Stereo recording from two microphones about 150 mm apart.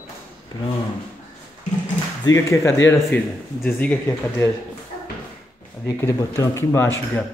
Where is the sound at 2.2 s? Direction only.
20° left (ahead or behind).